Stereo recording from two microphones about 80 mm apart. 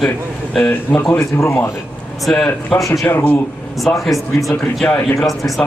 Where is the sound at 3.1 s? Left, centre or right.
Left.